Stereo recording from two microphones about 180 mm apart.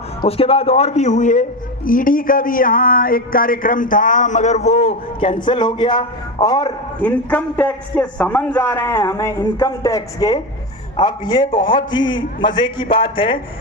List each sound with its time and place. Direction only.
0.2 s a man's voice: 30° left (ahead or behind)
7.0 s a man's voice: 10° left (ahead or behind); by 13.4 s 30° left (ahead or behind)